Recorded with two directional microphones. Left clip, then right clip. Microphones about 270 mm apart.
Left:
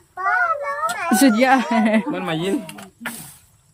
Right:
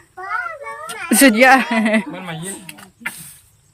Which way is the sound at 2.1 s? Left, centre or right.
Left.